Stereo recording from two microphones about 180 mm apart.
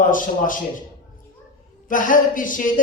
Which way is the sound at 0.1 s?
50° left (ahead or behind).